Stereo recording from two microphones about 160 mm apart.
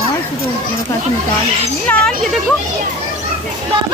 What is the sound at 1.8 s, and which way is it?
Speech, 10° left (ahead or behind).